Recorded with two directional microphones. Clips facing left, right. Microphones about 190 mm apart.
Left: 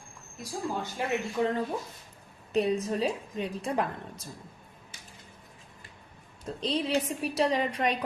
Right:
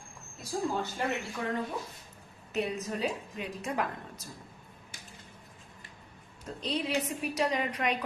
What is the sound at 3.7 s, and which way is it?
Speech, 30° left (ahead or behind).